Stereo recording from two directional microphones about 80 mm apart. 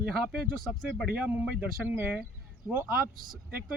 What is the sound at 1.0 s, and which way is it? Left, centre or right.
Speech, centre.